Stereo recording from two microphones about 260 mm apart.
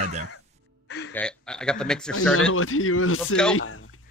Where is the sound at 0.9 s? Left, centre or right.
Left.